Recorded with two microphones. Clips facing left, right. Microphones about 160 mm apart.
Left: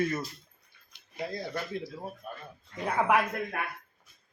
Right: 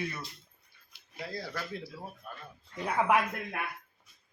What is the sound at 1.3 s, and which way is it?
Speech, 20° left (ahead or behind).